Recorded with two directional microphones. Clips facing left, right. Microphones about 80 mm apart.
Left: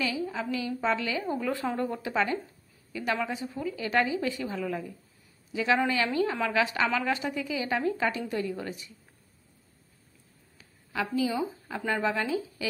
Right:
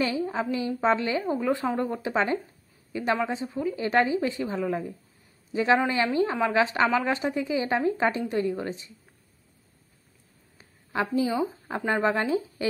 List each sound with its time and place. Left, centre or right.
0.0 s a woman's voice: right
10.6 s speech: right